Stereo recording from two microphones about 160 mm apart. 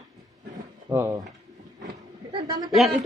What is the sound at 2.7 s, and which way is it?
Speech, centre (ahead or behind).